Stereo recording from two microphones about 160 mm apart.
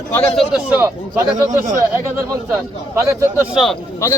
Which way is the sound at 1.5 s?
50° right (ahead or behind).